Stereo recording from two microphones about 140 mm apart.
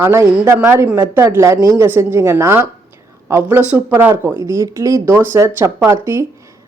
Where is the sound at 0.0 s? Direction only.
20° right (ahead or behind).